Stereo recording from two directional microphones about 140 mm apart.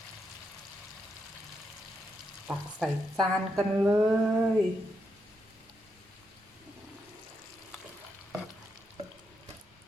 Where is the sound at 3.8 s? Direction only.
15° right (ahead or behind).